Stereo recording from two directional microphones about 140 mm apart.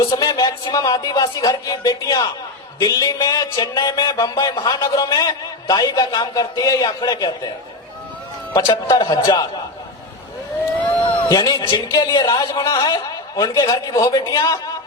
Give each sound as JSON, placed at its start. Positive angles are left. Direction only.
{"t": 0.0, "sound": "a man's voice", "side_deg": 25}
{"t": 8.5, "sound": "a man's voice", "side_deg": 25}
{"t": 11.2, "sound": "a man's voice", "side_deg": 30}